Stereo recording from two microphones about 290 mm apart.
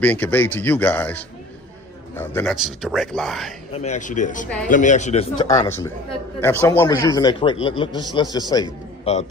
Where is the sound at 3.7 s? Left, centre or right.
Left.